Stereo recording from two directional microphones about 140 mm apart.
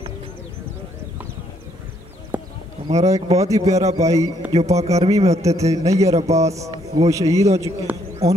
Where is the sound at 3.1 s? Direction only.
50° right (ahead or behind).